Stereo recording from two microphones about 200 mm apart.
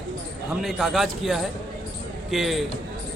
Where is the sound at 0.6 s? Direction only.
Centre (ahead or behind).